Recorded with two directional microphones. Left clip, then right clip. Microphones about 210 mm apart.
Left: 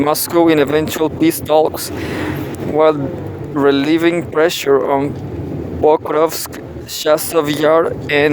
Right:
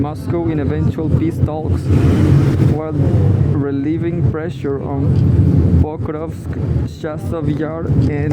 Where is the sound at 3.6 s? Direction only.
45° left (ahead or behind).